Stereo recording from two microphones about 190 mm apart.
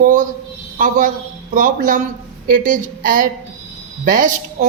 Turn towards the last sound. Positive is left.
turn(degrees=-45)  # may be behind; listen again after turning